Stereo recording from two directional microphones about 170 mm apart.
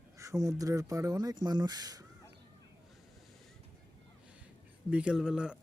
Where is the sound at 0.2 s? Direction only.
20° right (ahead or behind).